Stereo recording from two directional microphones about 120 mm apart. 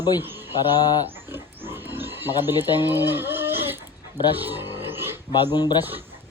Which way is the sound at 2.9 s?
20° right (ahead or behind).